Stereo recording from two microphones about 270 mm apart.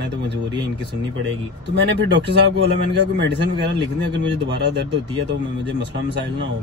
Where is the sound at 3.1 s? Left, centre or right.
Right.